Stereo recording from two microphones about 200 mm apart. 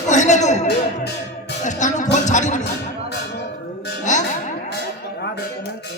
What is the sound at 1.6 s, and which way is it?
Music, 35° left (ahead or behind).